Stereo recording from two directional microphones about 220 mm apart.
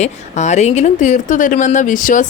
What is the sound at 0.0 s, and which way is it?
A woman's voice, 30° left (ahead or behind).